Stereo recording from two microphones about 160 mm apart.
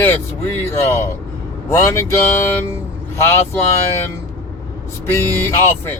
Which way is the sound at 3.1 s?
15° left (ahead or behind).